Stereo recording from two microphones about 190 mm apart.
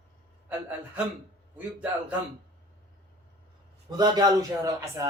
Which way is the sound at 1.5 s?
5° right (ahead or behind).